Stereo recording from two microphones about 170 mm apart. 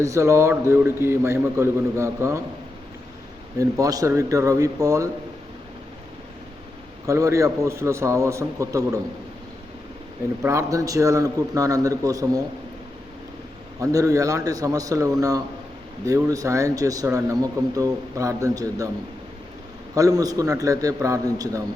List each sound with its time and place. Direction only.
0.0 s a man's voice: 20° right (ahead or behind)
3.6 s speech: 20° right (ahead or behind)
7.0 s a man's voice: 20° right (ahead or behind)
10.4 s speech: 15° right (ahead or behind)
13.7 s speech: 20° right (ahead or behind)
20.0 s speech: 20° right (ahead or behind)